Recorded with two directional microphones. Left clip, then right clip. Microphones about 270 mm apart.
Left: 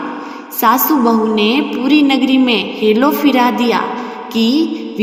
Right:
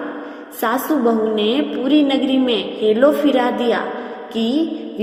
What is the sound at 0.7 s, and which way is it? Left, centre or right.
A woman's voice, left.